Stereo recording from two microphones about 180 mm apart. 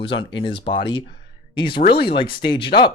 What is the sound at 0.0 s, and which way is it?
Speech, 30° left (ahead or behind).